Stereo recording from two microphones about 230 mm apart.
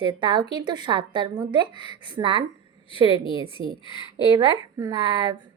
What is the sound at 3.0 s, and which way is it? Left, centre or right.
Speech, left.